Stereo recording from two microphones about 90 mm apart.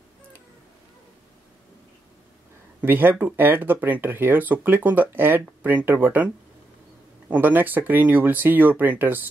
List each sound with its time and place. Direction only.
2.8 s speech: 20° right (ahead or behind)